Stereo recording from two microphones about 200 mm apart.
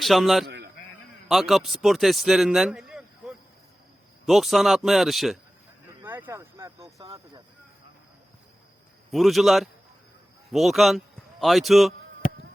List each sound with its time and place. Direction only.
0.0 s speech: centre (ahead or behind)
0.4 s a sound: 55° right (ahead or behind)
1.3 s speech: centre (ahead or behind); by 7.4 s 20° right (ahead or behind)
9.1 s a man's voice: centre (ahead or behind)